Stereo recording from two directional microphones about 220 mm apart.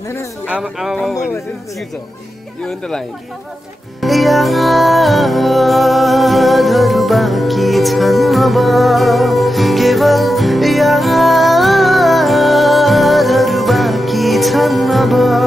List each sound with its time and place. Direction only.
0.5 s speech: centre (ahead or behind)
4.0 s music: centre (ahead or behind)